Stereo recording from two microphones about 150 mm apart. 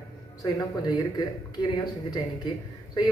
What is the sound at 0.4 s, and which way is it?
Speech, 25° left (ahead or behind).